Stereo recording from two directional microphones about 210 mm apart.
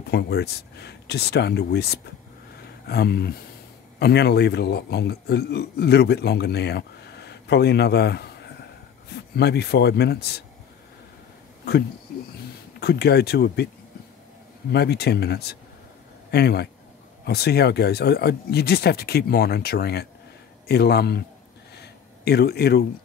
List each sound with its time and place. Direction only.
0.1 s a man's voice: 50° left (ahead or behind)
12.8 s a man's voice: 50° left (ahead or behind)
14.7 s a man's voice: 50° left (ahead or behind)
21.7 s a sound: 50° left (ahead or behind)